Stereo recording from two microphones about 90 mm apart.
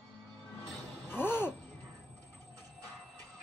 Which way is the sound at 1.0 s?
20° left (ahead or behind).